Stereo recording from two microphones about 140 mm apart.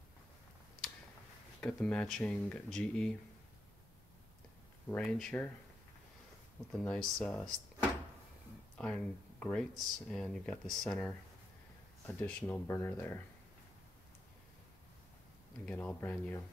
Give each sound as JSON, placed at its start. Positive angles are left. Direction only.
{"t": 1.6, "sound": "speech", "side_deg": 10}
{"t": 4.8, "sound": "speech", "side_deg": 10}
{"t": 6.7, "sound": "speech", "side_deg": 5}
{"t": 8.7, "sound": "speech", "side_deg": 5}
{"t": 12.2, "sound": "speech", "side_deg": 10}
{"t": 15.6, "sound": "speech", "side_deg": 10}